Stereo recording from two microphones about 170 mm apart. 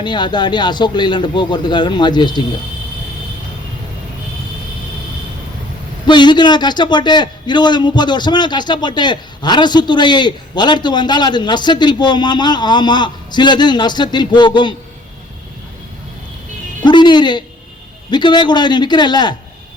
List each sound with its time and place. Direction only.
0.0 s a man's voice: 25° left (ahead or behind)
6.1 s a man's voice: 25° left (ahead or behind)
16.8 s a man's voice: 25° left (ahead or behind)